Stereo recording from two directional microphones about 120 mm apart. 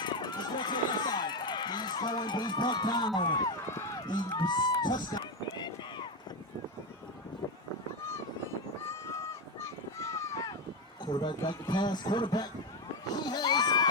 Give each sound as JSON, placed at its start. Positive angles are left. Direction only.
{"t": 0.0, "sound": "run", "side_deg": 40}
{"t": 3.2, "sound": "speech", "side_deg": 35}
{"t": 3.7, "sound": "run", "side_deg": 25}
{"t": 4.0, "sound": "run", "side_deg": 40}
{"t": 8.9, "sound": "a sound", "side_deg": 25}
{"t": 11.0, "sound": "a man's voice", "side_deg": 40}
{"t": 13.1, "sound": "a sound", "side_deg": 35}